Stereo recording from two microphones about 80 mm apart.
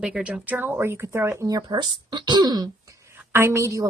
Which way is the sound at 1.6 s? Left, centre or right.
Right.